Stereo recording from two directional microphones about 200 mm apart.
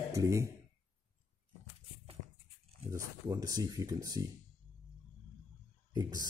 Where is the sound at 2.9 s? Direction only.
15° right (ahead or behind).